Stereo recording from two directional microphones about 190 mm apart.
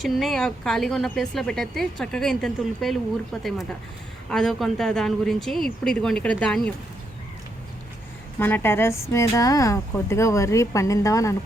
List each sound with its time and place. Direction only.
0.0 s speech: centre (ahead or behind)
8.4 s speech: 10° left (ahead or behind)